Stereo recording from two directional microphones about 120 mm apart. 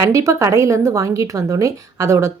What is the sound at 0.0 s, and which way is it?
A woman's voice, 25° right (ahead or behind).